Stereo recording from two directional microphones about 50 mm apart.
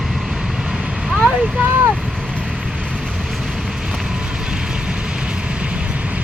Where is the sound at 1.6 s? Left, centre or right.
Right.